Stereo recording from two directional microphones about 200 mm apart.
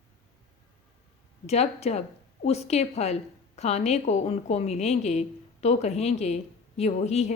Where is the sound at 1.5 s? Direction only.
30° left (ahead or behind).